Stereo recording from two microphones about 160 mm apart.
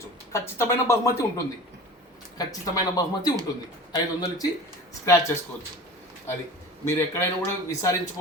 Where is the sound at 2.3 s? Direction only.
25° left (ahead or behind).